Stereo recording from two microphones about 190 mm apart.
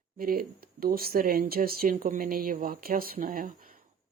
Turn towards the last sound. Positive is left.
turn(degrees=-50)  # may be behind; listen again after turning